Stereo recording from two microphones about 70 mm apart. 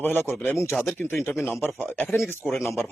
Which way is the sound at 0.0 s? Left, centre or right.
Left.